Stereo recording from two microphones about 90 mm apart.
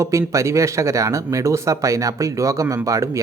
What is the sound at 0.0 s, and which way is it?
Speech, 35° right (ahead or behind).